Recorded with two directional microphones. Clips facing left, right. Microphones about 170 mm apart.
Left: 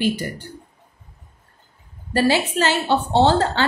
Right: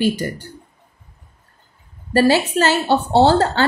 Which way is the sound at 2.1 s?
40° right (ahead or behind).